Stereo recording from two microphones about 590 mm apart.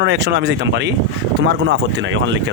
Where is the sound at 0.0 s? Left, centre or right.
Centre.